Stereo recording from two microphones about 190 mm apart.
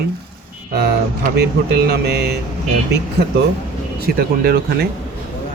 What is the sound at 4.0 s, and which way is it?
Speech, 55° right (ahead or behind).